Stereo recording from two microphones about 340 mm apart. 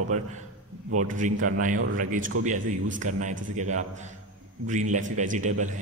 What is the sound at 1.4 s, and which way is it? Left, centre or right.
A man's voice, right.